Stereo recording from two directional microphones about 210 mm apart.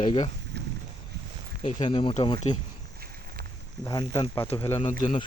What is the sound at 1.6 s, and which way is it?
Speech, 25° left (ahead or behind).